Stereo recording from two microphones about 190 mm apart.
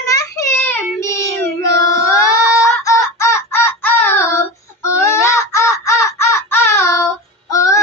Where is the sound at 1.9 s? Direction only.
15° left (ahead or behind).